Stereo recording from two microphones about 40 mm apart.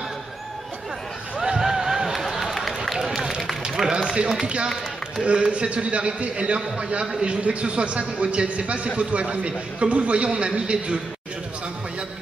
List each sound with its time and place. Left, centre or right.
1.4 s a sound: centre
2.2 s run: centre
3.9 s run: right
5.2 s a man's voice: right